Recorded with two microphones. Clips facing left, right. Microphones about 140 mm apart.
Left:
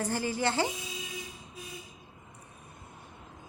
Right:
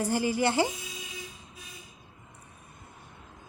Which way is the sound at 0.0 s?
10° right (ahead or behind).